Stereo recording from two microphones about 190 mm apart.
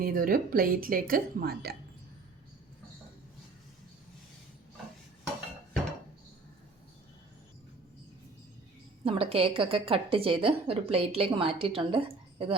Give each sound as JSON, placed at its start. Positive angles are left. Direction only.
{"t": 0.0, "sound": "a woman's voice", "side_deg": -50}
{"t": 9.0, "sound": "a woman's voice", "side_deg": -30}